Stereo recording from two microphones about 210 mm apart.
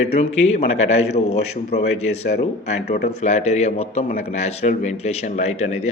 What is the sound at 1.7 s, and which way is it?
Speech, 55° left (ahead or behind).